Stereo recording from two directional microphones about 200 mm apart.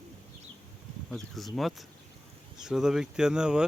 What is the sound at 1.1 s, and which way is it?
Speech, centre (ahead or behind).